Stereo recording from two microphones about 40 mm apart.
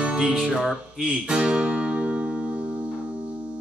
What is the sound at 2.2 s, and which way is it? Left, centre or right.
Music, centre.